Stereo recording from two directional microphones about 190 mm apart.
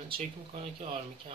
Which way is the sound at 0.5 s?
35° right (ahead or behind).